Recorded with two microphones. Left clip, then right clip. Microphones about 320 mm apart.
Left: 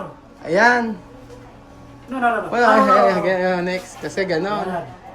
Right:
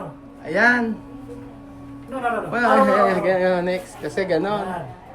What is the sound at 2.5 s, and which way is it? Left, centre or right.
Speech, centre.